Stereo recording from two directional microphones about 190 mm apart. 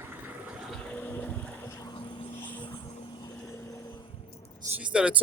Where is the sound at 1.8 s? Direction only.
25° left (ahead or behind).